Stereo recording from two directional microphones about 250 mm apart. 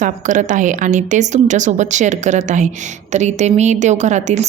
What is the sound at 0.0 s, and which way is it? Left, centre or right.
A woman's voice, right.